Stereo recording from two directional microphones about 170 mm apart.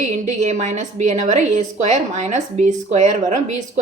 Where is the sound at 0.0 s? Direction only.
45° right (ahead or behind).